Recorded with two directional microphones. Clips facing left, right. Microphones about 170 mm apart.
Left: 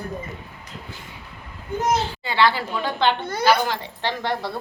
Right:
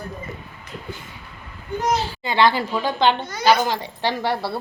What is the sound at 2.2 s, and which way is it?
A woman's voice, 15° right (ahead or behind).